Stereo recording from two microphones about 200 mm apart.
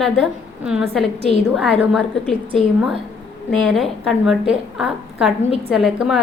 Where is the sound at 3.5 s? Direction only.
Centre (ahead or behind).